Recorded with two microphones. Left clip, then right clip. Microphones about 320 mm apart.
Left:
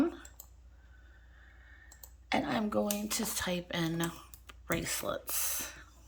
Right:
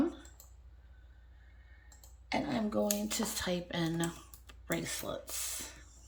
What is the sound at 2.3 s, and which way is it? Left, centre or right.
Speech, centre.